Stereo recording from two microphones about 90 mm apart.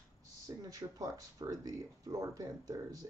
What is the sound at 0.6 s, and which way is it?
Speech, 45° right (ahead or behind).